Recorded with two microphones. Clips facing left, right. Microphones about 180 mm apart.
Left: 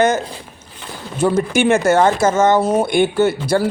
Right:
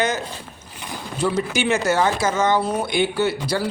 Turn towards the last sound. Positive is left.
turn(degrees=50)  # may be behind; listen again after turning